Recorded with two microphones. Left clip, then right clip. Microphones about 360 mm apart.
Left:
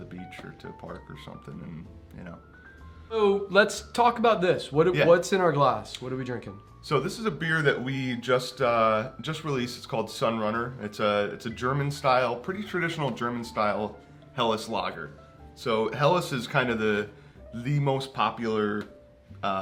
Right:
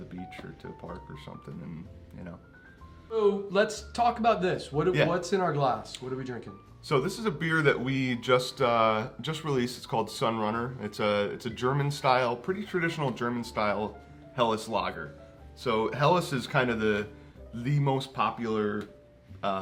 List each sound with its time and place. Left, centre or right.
0.1 s speech: centre
3.1 s speech: left
6.8 s speech: centre